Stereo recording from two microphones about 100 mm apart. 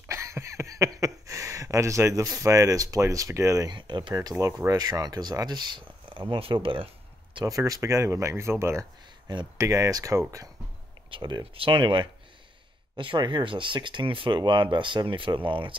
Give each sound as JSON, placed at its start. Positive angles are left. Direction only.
{"t": 0.1, "sound": "a sound", "side_deg": -30}
{"t": 3.7, "sound": "speech", "side_deg": -50}
{"t": 4.1, "sound": "speech", "side_deg": -35}
{"t": 4.7, "sound": "speech", "side_deg": -40}
{"t": 7.4, "sound": "speech", "side_deg": -35}
{"t": 11.1, "sound": "speech", "side_deg": -50}